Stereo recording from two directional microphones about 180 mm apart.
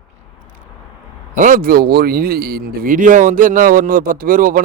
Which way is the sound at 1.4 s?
50° right (ahead or behind).